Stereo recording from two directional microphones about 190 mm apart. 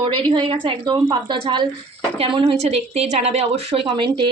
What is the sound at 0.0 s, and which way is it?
A woman's voice, 25° right (ahead or behind).